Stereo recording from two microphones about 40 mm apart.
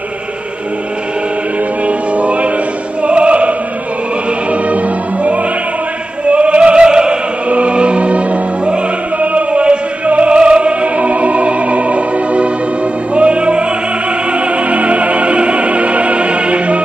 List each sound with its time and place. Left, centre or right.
1.9 s music: right
3.0 s opera: right
7.4 s music: right
14.3 s opera: right